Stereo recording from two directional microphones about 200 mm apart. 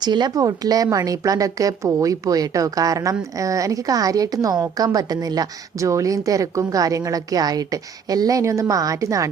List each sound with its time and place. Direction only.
0.0 s a woman's voice: 20° right (ahead or behind)